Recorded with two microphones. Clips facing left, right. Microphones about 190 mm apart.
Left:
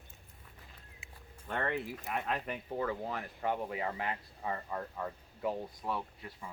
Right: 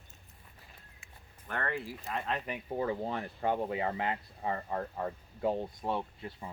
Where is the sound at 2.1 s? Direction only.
5° left (ahead or behind).